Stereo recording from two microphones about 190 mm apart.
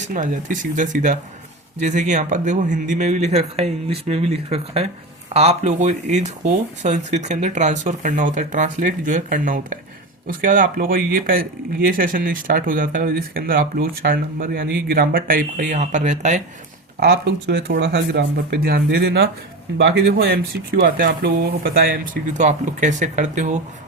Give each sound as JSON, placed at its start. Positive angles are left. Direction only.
{"t": 0.1, "sound": "speech", "side_deg": -40}
{"t": 17.0, "sound": "speech", "side_deg": -60}